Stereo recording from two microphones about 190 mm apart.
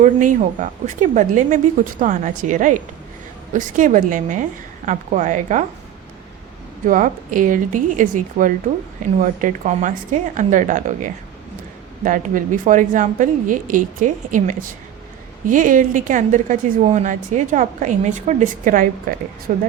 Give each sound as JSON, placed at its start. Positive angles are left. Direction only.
{"t": 0.0, "sound": "a woman's voice", "side_deg": -45}
{"t": 6.8, "sound": "a woman's voice", "side_deg": -45}